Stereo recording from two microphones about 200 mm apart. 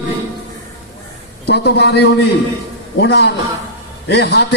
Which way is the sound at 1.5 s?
60° left (ahead or behind).